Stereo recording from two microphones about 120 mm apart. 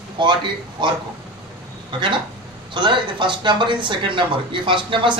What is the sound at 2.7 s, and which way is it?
Speech, 40° right (ahead or behind).